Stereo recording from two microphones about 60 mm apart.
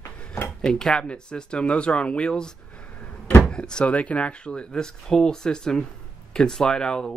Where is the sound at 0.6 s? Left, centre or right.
Centre.